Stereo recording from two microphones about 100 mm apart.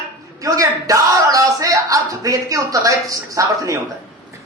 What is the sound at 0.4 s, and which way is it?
A man's voice, 35° right (ahead or behind).